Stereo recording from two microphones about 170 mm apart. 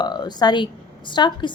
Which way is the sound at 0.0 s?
25° left (ahead or behind).